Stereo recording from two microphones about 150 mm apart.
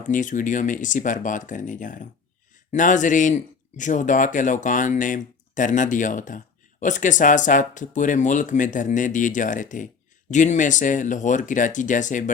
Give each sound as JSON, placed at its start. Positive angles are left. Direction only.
{"t": 0.1, "sound": "a man's voice", "side_deg": 60}